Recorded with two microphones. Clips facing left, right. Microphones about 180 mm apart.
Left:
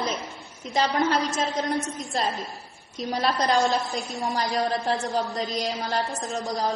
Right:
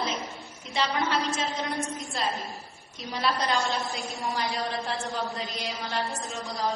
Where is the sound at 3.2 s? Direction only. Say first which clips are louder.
Left 4 dB; 45° left (ahead or behind).